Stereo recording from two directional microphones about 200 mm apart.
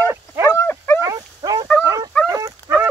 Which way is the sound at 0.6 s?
10° left (ahead or behind).